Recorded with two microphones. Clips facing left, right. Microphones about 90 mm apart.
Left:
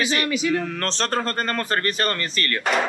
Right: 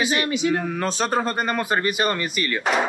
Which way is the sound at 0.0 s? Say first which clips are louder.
Right 1 dB; 15° right (ahead or behind).